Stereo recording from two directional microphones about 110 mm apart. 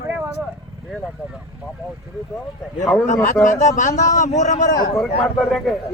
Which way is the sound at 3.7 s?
90° left.